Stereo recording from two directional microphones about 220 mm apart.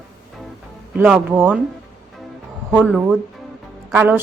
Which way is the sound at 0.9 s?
5° right (ahead or behind).